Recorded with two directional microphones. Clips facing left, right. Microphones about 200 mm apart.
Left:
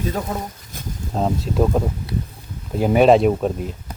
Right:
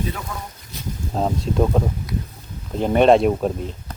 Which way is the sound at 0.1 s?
40° left (ahead or behind).